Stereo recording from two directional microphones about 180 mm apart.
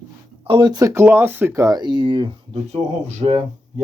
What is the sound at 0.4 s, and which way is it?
Speech, 25° right (ahead or behind).